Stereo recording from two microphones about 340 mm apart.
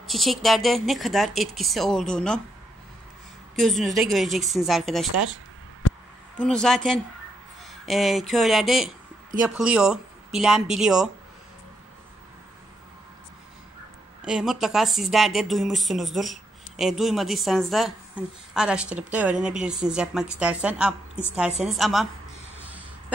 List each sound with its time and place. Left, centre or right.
0.0 s a woman's voice: centre
3.5 s a woman's voice: centre
5.8 s a sound: left
6.3 s a woman's voice: centre
7.8 s a woman's voice: centre
14.2 s a woman's voice: centre
22.7 s music: centre